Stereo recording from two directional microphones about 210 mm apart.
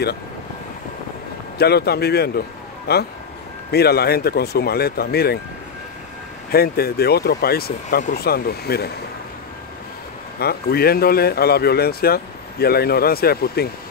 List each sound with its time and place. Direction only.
1.6 s speech: 50° left (ahead or behind)
6.5 s speech: 45° left (ahead or behind)
10.4 s speech: 50° left (ahead or behind)